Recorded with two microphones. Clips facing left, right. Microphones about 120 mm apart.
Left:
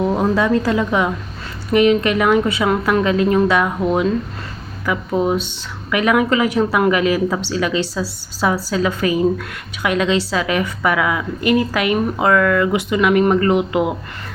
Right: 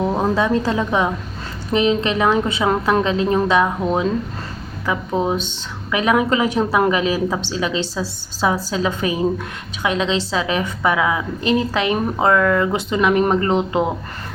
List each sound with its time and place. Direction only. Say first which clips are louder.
0.2 s a woman's voice: left 2 dB; 25° right (ahead or behind)